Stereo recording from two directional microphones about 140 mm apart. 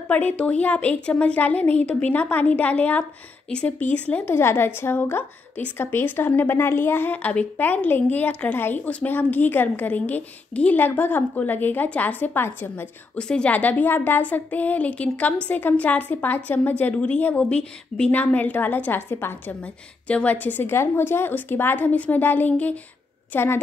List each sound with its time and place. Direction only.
0.1 s a woman's voice: 10° left (ahead or behind)